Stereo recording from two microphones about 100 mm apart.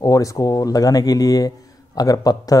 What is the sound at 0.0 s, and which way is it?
Speech, 35° left (ahead or behind).